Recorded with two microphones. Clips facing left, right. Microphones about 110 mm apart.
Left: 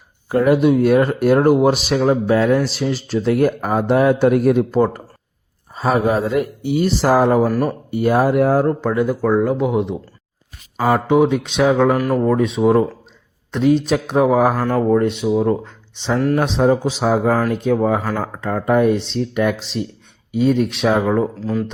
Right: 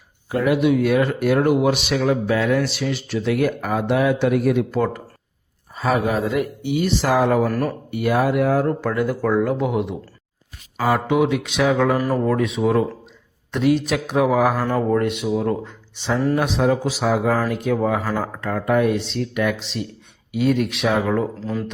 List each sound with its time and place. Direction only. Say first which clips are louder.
0.3 s speech: left 4 dB; 40° left (ahead or behind)
7.4 s speech: left 4 dB; 10° left (ahead or behind)
7.9 s speech: left 4 dB; 30° left (ahead or behind)
8.8 s speech: left 3 dB; 20° left (ahead or behind)
11.9 s speech: left 3 dB; 5° left (ahead or behind)
12.2 s speech: left 4 dB; 25° left (ahead or behind)
13.8 s speech: left 3 dB; 30° left (ahead or behind)
14.6 s speech: left 4 dB; centre (ahead or behind)
15.3 s speech: left 4 dB; 15° left (ahead or behind)
16.1 s speech: left 3 dB; centre (ahead or behind)
16.4 s speech: left 3 dB; 30° left (ahead or behind)
21.0 s speech: left 3 dB; 15° left (ahead or behind)